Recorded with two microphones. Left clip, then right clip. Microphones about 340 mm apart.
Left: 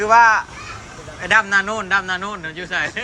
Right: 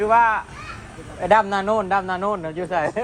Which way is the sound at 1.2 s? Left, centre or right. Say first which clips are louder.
Left 2 dB; centre.